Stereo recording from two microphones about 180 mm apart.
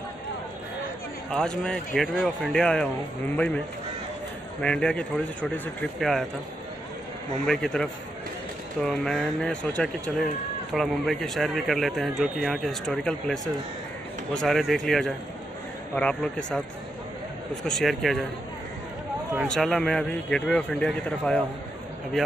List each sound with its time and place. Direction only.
1.3 s speech: 5° left (ahead or behind)
7.4 s speech: 5° left (ahead or behind)
17.6 s speech: centre (ahead or behind)
19.4 s speech: 5° left (ahead or behind)